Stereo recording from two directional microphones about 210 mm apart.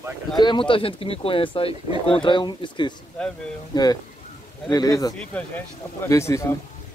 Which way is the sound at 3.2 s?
5° left (ahead or behind).